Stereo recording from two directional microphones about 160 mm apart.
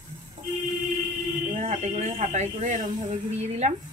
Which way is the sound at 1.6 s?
45° right (ahead or behind).